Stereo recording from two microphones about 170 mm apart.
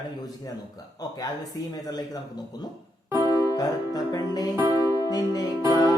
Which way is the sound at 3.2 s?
20° left (ahead or behind).